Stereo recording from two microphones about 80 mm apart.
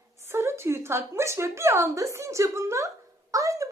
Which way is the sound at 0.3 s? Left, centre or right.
Right.